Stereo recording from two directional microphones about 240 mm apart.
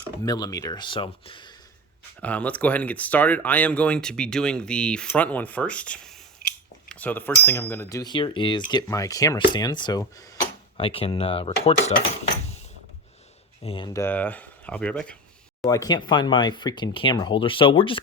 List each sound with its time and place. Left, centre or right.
0.3 s speech: centre
2.2 s speech: centre
6.8 s cutlery: centre
7.4 s speech: centre; by 11.9 s left
13.6 s speech: left; by 15.2 s centre
15.6 s speech: centre